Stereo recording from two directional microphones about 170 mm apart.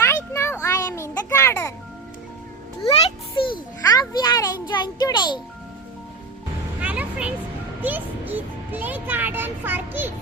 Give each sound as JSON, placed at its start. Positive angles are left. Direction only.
{"t": 0.0, "sound": "children playing", "side_deg": 15}
{"t": 3.5, "sound": "a sound", "side_deg": 25}
{"t": 6.7, "sound": "vehicle", "side_deg": -10}
{"t": 7.8, "sound": "music", "side_deg": -10}